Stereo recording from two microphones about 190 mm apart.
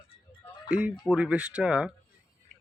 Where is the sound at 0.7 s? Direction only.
5° right (ahead or behind).